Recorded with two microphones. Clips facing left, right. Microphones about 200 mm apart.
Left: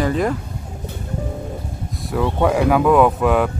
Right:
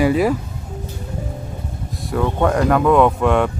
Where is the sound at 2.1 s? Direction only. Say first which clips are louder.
Even; 5° left (ahead or behind).